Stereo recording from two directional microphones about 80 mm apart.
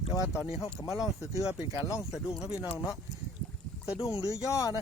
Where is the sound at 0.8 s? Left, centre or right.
Left.